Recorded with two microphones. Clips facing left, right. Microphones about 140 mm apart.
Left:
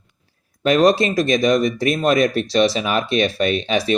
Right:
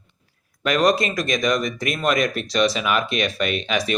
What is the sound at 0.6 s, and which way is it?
Speech, 30° left (ahead or behind).